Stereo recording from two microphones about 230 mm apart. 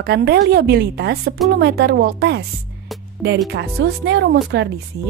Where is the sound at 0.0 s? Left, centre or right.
Right.